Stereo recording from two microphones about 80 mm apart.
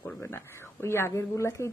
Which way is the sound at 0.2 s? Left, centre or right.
Left.